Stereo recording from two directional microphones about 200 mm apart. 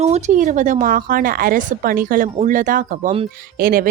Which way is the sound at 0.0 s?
35° right (ahead or behind).